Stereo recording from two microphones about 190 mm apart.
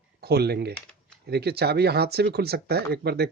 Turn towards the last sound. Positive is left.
turn(degrees=-60)  # may be behind; listen again after turning